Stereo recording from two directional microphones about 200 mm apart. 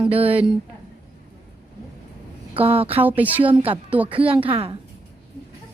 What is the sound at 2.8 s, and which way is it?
Speech, 10° right (ahead or behind).